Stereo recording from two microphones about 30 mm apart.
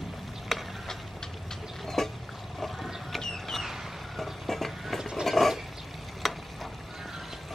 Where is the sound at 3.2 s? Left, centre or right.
Centre.